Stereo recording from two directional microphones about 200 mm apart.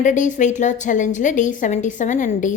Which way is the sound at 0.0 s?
40° left (ahead or behind).